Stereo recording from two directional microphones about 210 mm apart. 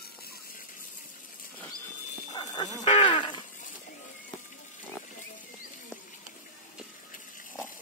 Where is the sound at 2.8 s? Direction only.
35° left (ahead or behind).